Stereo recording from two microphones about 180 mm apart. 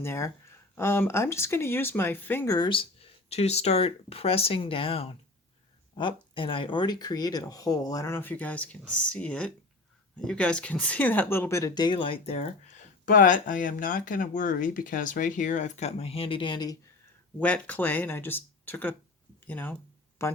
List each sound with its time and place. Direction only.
0.0 s speech: 15° left (ahead or behind)
2.6 s speech: 30° left (ahead or behind)
17.4 s speech: 10° left (ahead or behind)